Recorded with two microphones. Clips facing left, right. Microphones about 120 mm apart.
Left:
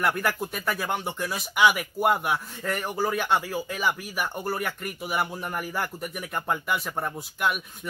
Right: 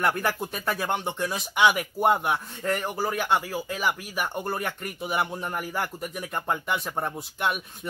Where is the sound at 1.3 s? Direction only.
20° right (ahead or behind).